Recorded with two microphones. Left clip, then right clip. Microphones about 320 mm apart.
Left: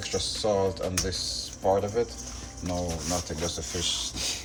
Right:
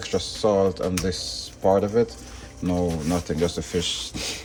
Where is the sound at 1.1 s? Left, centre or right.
Right.